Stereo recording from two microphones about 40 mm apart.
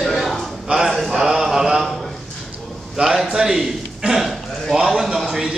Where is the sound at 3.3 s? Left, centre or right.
Centre.